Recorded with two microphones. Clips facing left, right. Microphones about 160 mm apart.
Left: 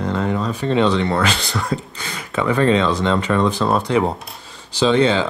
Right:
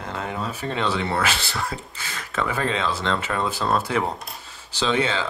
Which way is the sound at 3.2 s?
5° right (ahead or behind).